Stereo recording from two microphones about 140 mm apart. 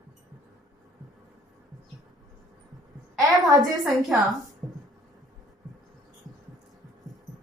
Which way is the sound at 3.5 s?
25° right (ahead or behind).